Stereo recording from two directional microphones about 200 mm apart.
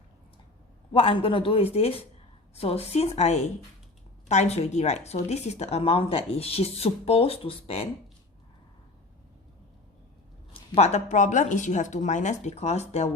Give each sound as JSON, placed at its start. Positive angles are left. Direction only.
{"t": 0.9, "sound": "a man's voice", "side_deg": 25}
{"t": 10.5, "sound": "a woman's voice", "side_deg": 35}